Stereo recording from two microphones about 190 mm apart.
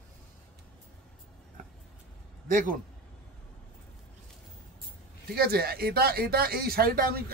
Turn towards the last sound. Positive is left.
turn(degrees=-50)  # may be behind; listen again after turning